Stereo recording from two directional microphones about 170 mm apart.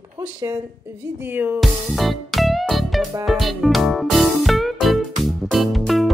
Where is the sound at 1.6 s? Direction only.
Centre (ahead or behind).